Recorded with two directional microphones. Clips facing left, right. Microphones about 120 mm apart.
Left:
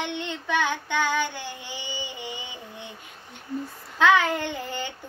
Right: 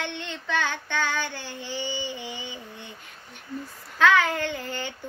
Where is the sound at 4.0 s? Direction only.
20° left (ahead or behind).